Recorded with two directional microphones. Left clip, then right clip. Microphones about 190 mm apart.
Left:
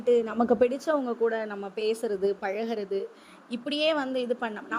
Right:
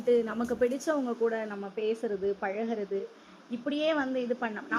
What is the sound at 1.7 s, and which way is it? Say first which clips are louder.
A woman's voice: left 3 dB; 45° left (ahead or behind).